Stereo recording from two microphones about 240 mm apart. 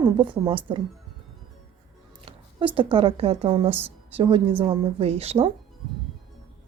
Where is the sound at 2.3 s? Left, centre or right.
Right.